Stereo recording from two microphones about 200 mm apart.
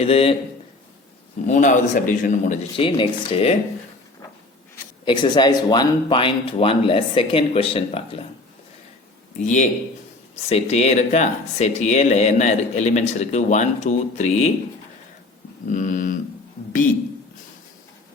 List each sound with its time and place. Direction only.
0.0 s speech: 30° left (ahead or behind)
1.5 s speech: 40° left (ahead or behind)
2.7 s speech: 25° left (ahead or behind)
5.0 s speech: 25° left (ahead or behind)
9.4 s speech: 35° left (ahead or behind)
15.6 s speech: 40° left (ahead or behind)